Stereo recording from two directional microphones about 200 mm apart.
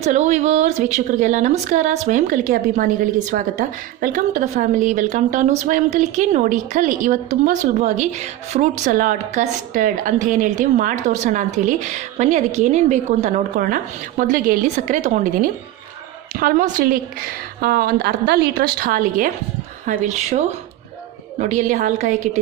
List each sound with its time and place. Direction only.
0.0 s a woman's voice: 35° right (ahead or behind)
21.5 s a woman's voice: 40° right (ahead or behind)